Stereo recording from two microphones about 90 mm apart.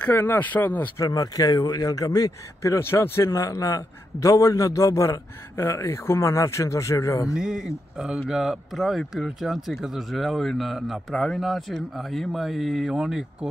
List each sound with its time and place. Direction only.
0.4 s speech: 20° left (ahead or behind)
0.9 s speech: 40° left (ahead or behind)
7.3 s speech: 10° right (ahead or behind)